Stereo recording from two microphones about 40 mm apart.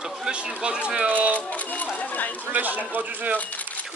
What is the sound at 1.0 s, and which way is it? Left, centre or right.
Speech, right.